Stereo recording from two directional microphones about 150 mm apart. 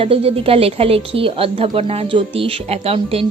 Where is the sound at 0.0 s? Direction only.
40° right (ahead or behind).